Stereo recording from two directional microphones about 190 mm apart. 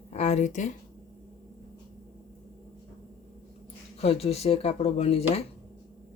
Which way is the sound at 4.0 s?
35° left (ahead or behind).